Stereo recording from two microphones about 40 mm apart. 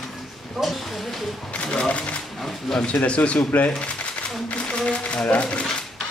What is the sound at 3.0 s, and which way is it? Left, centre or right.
Speech, left.